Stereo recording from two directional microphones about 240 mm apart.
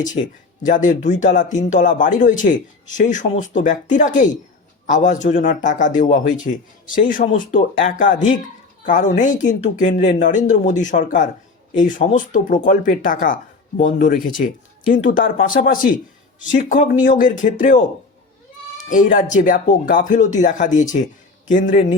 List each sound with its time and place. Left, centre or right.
0.6 s speech: left
18.9 s speech: left